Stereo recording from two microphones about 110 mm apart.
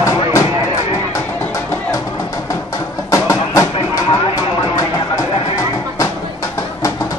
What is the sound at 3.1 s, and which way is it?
Music, 30° left (ahead or behind).